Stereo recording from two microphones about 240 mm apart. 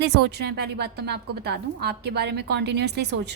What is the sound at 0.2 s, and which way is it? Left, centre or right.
A woman's voice, right.